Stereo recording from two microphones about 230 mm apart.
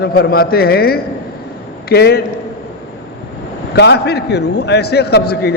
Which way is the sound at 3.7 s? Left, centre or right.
Left.